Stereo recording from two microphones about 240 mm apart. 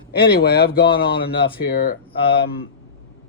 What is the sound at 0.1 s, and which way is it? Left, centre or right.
Speech, left.